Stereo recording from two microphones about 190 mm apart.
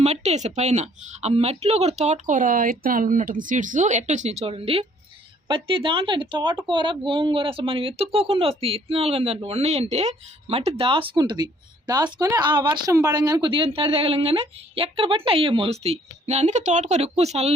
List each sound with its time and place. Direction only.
0.0 s a woman's voice: 35° right (ahead or behind)